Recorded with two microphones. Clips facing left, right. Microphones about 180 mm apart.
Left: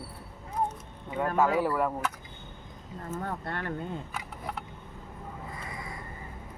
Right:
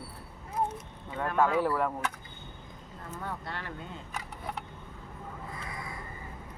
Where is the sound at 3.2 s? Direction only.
50° left (ahead or behind).